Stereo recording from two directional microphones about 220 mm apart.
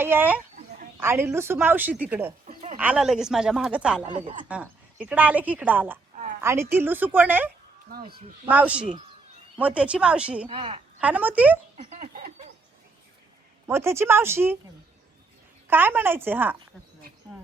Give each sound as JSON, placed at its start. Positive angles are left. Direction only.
{"t": 0.0, "sound": "a woman's voice", "side_deg": -10}
{"t": 2.5, "sound": "a sound", "side_deg": -35}
{"t": 2.7, "sound": "a woman's voice", "side_deg": -5}
{"t": 7.9, "sound": "speech", "side_deg": -45}
{"t": 8.4, "sound": "a woman's voice", "side_deg": -5}
{"t": 10.4, "sound": "a woman's voice", "side_deg": -25}
{"t": 11.0, "sound": "a woman's voice", "side_deg": -5}
{"t": 11.9, "sound": "a sound", "side_deg": -40}
{"t": 13.7, "sound": "a woman's voice", "side_deg": -10}
{"t": 15.6, "sound": "a woman's voice", "side_deg": -10}